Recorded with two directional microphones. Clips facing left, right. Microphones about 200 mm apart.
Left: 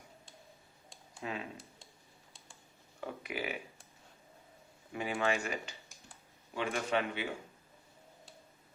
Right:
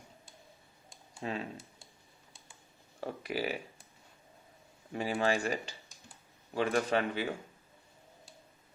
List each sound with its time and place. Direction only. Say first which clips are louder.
1.2 s speech: right 3 dB; 35° right (ahead or behind)
3.0 s speech: right 4 dB; 35° right (ahead or behind)
4.9 s speech: right 3 dB; 35° right (ahead or behind)